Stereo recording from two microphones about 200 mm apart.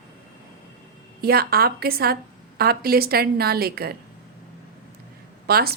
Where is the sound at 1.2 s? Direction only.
50° right (ahead or behind).